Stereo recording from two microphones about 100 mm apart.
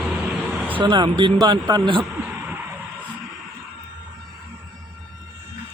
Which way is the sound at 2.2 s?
15° right (ahead or behind).